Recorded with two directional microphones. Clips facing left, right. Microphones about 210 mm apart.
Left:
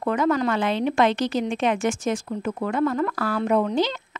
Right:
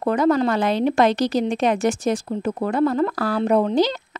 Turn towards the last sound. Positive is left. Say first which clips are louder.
# right 3 dB
turn(degrees=-35)  # may be behind; listen again after turning